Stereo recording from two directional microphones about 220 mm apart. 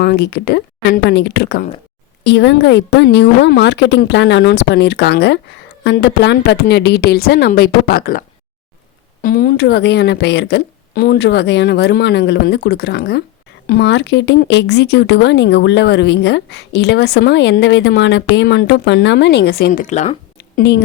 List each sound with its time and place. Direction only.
0.0 s speech: 45° left (ahead or behind)
9.2 s speech: 40° left (ahead or behind)
20.6 s speech: 50° left (ahead or behind)